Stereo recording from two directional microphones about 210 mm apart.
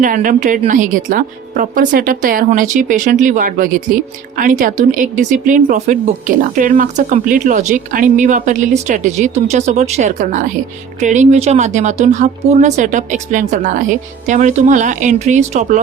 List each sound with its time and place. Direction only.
0.0 s a woman's voice: 40° right (ahead or behind)